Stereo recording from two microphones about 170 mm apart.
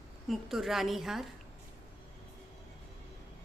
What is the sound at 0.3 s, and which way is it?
A woman's voice, centre (ahead or behind).